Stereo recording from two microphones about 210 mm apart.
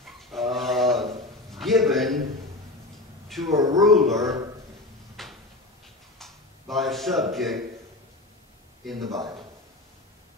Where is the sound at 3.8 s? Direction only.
Centre (ahead or behind).